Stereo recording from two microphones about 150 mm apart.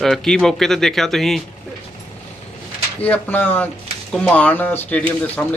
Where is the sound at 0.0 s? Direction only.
5° left (ahead or behind).